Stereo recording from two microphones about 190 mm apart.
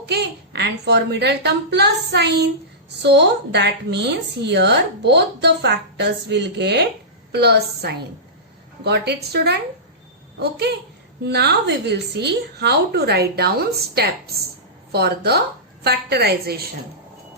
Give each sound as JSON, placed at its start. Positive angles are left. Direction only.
{"t": 0.0, "sound": "a woman's voice", "side_deg": -60}